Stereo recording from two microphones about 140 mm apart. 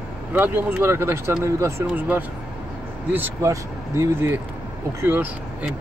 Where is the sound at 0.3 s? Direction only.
15° right (ahead or behind).